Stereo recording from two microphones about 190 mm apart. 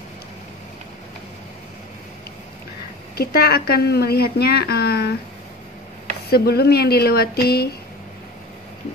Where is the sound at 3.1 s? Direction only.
55° left (ahead or behind).